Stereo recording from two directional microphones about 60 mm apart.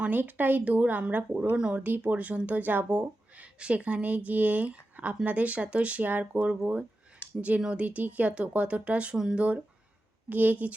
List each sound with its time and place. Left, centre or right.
0.0 s speech: right
7.6 s speech: right
9.1 s speech: centre
10.2 s speech: right